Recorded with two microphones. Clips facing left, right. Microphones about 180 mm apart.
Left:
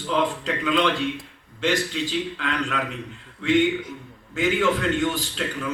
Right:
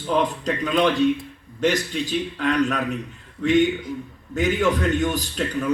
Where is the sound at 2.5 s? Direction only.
40° right (ahead or behind).